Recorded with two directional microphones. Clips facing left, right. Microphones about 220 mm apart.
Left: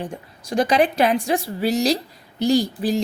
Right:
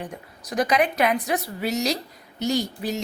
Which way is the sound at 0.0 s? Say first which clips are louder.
Left 4 dB; 30° left (ahead or behind).